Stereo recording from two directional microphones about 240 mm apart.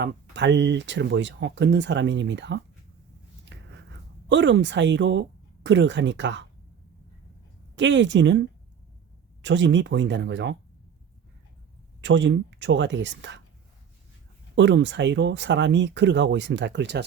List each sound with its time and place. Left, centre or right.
0.0 s speech: right
3.5 s a sound: right
4.3 s speech: right
7.8 s speech: right
12.0 s speech: right
14.5 s speech: right